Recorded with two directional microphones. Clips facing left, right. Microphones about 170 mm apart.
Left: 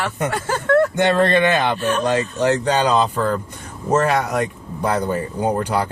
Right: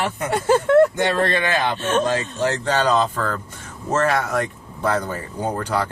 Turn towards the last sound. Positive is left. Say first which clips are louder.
# left 3 dB
turn(degrees=15)  # may be behind; listen again after turning